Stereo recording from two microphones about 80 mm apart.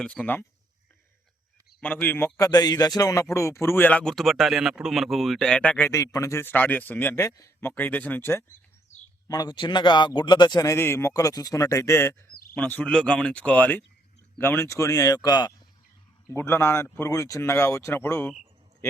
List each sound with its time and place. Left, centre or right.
0.0 s speech: centre
1.8 s speech: left
2.5 s speech: left
4.0 s speech: centre
6.1 s speech: left
6.4 s speech: left
7.2 s speech: left
7.8 s speech: left
9.2 s a man's voice: left
10.8 s speech: left
12.5 s speech: centre; by 15.5 s left
16.3 s speech: left
17.5 s speech: left